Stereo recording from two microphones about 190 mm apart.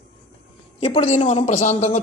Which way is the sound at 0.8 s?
35° left (ahead or behind).